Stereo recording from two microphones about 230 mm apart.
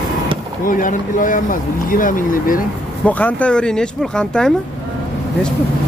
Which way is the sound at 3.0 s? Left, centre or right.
Centre.